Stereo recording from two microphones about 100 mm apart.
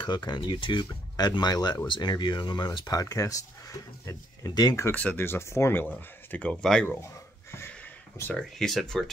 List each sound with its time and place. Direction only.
0.0 s speech: 50° left (ahead or behind)
4.9 s speech: 15° left (ahead or behind)
8.3 s speech: 5° left (ahead or behind)